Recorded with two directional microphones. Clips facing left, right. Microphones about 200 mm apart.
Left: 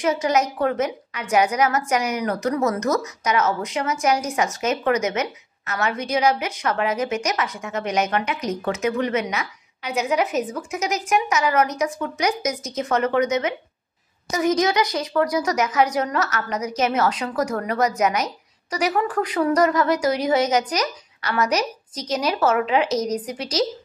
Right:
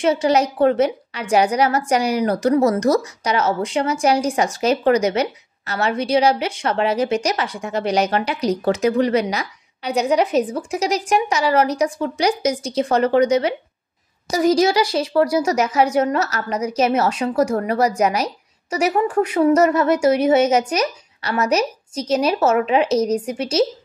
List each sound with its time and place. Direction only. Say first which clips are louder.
0.0 s a woman's voice: right 4 dB; 30° right (ahead or behind)